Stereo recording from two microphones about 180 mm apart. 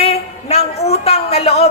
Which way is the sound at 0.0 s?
35° left (ahead or behind).